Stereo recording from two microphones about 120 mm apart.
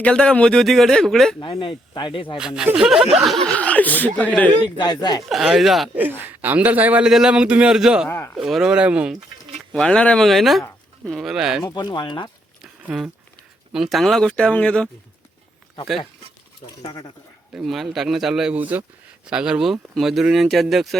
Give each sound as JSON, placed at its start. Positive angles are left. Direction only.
{"t": 0.0, "sound": "a man's voice", "side_deg": 10}
{"t": 1.4, "sound": "speech", "side_deg": 45}
{"t": 2.7, "sound": "a man's voice", "side_deg": -5}
{"t": 3.5, "sound": "speech", "side_deg": 10}
{"t": 4.8, "sound": "speech", "side_deg": 35}
{"t": 5.3, "sound": "a man's voice", "side_deg": 0}
{"t": 6.0, "sound": "a man's voice", "side_deg": -15}
{"t": 8.1, "sound": "speech", "side_deg": 20}
{"t": 8.4, "sound": "a man's voice", "side_deg": -5}
{"t": 9.7, "sound": "a man's voice", "side_deg": 5}
{"t": 11.6, "sound": "speech", "side_deg": 35}
{"t": 12.9, "sound": "a man's voice", "side_deg": 0}
{"t": 16.8, "sound": "speech", "side_deg": 30}
{"t": 17.5, "sound": "a man's voice", "side_deg": 0}